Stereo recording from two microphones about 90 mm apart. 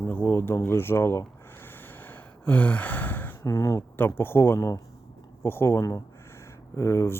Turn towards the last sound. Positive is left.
turn(degrees=30)  # may be behind; listen again after turning